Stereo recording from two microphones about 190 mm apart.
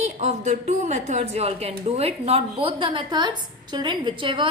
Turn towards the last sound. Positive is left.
turn(degrees=-25)  # may be behind; listen again after turning